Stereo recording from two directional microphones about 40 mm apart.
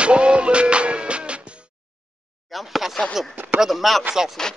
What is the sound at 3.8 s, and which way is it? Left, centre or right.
Speech, centre.